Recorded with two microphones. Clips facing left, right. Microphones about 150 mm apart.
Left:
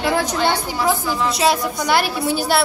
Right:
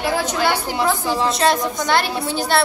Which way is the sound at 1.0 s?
30° right (ahead or behind).